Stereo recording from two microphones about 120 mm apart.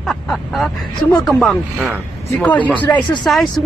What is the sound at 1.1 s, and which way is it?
Speech, centre (ahead or behind).